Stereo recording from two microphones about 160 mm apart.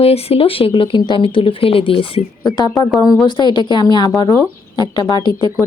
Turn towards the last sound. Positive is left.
turn(degrees=25)  # may be behind; listen again after turning